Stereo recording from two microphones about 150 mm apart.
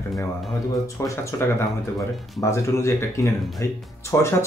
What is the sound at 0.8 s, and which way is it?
Speech, 20° left (ahead or behind).